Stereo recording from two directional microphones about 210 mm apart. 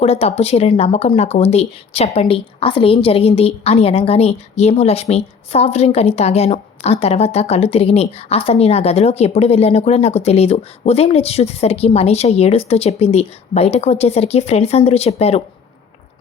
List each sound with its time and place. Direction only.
0.0 s speech: 30° left (ahead or behind)